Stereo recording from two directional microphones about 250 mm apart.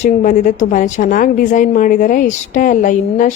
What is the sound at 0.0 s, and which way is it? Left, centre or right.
A woman's voice, left.